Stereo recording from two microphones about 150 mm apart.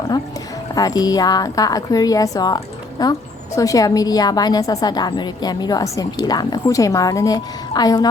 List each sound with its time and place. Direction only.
0.8 s a woman's voice: 25° left (ahead or behind)